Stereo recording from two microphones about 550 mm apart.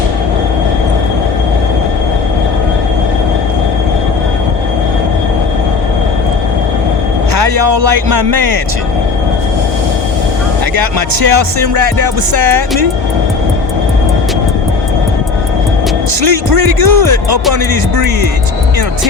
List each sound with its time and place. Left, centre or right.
7.3 s speech: right
11.2 s speech: right
16.6 s speech: right
16.8 s speech: right
17.9 s speech: right